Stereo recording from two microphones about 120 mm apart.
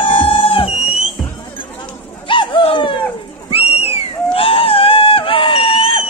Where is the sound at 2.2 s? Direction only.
45° left (ahead or behind).